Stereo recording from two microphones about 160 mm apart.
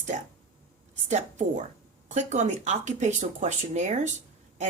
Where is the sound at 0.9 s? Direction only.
50° right (ahead or behind).